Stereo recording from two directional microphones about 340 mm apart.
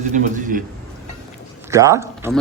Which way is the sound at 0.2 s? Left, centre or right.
Right.